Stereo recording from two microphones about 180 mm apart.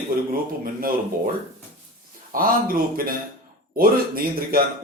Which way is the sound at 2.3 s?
55° right (ahead or behind).